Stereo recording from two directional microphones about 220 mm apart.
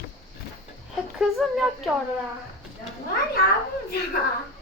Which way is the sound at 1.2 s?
Centre (ahead or behind).